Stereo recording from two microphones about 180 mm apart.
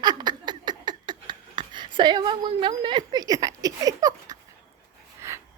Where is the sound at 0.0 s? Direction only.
25° right (ahead or behind).